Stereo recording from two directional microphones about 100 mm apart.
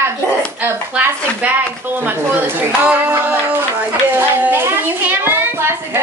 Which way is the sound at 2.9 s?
20° right (ahead or behind).